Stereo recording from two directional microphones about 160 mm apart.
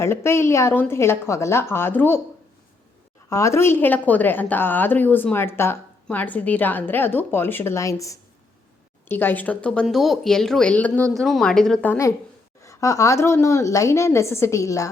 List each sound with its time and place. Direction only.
0.0 s a woman's voice: 15° left (ahead or behind)
3.2 s a woman's voice: 20° left (ahead or behind)